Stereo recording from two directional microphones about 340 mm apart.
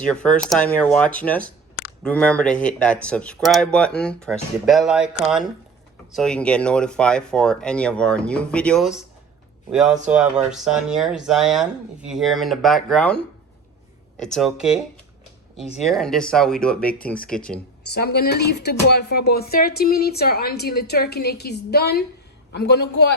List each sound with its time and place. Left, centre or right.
0.0 s speech: centre
14.2 s speech: centre
15.8 s speech: centre
17.9 s speech: left